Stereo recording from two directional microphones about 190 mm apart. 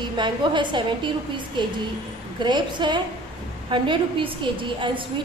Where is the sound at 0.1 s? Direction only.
25° right (ahead or behind).